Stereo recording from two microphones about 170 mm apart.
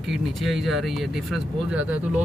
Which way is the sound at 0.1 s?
Centre (ahead or behind).